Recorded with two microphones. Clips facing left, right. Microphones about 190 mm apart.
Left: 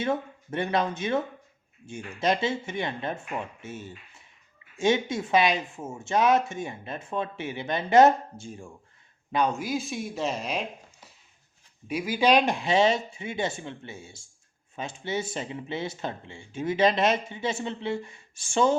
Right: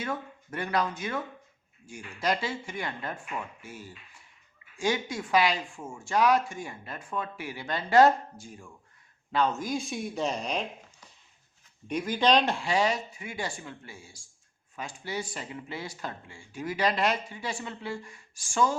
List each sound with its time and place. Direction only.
0.0 s speech: 25° left (ahead or behind)
9.3 s speech: 15° left (ahead or behind)
11.9 s speech: 5° left (ahead or behind); by 18.7 s 25° left (ahead or behind)